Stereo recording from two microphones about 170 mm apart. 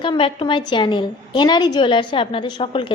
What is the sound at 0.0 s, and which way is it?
A woman's voice, 30° left (ahead or behind).